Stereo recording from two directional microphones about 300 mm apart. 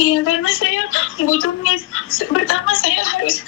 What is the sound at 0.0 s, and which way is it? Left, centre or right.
A woman's voice, left.